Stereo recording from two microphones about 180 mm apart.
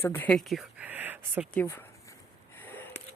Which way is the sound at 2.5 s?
10° left (ahead or behind).